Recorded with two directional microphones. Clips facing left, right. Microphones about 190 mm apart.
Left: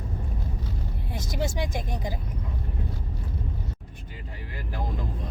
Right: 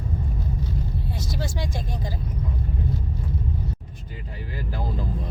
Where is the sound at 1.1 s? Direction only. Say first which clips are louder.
Left 5 dB; 20° left (ahead or behind).